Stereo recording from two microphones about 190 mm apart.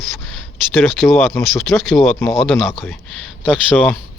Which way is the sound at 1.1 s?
10° left (ahead or behind).